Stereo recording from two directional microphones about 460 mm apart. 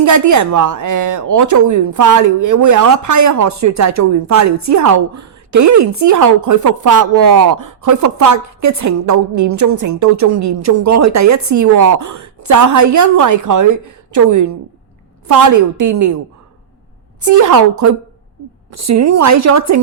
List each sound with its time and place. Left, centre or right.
0.0 s a woman's voice: right
17.2 s a woman's voice: right